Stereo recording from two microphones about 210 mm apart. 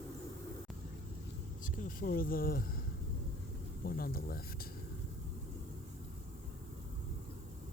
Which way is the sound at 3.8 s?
45° left (ahead or behind).